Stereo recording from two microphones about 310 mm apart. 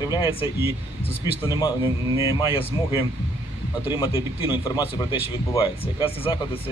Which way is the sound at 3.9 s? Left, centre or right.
Centre.